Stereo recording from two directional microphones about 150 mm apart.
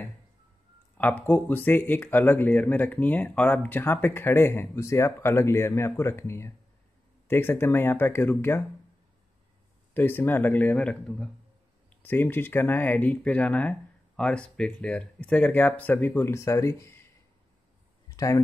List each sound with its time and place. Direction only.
0.9 s speech: 10° left (ahead or behind)
9.9 s speech: 15° left (ahead or behind)
18.0 s a sound: 25° left (ahead or behind)